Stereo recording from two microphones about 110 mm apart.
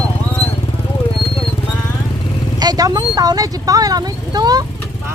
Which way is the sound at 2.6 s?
35° right (ahead or behind).